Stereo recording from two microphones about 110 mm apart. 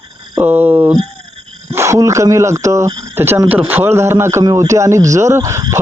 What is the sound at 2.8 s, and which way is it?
Speech, 40° right (ahead or behind).